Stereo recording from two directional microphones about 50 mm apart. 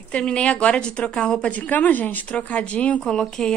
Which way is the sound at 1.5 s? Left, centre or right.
Left.